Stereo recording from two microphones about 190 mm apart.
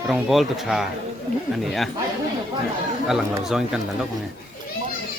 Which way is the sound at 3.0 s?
5° right (ahead or behind).